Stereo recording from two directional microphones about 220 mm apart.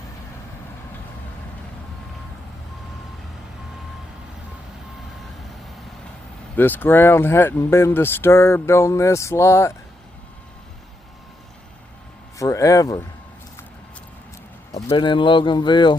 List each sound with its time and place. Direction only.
6.6 s speech: 10° left (ahead or behind)
12.4 s speech: 15° left (ahead or behind)
14.7 s speech: 15° left (ahead or behind)